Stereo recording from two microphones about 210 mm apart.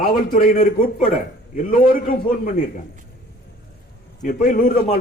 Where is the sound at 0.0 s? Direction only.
40° left (ahead or behind).